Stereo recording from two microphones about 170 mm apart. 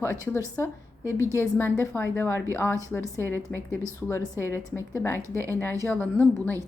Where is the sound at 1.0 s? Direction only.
15° right (ahead or behind).